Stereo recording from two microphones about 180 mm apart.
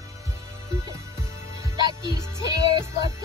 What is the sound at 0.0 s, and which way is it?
Music, 15° right (ahead or behind).